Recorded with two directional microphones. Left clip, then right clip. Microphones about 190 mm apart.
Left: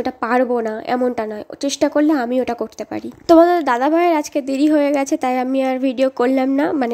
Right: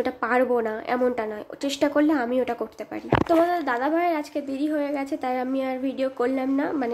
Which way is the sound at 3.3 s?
50° left (ahead or behind).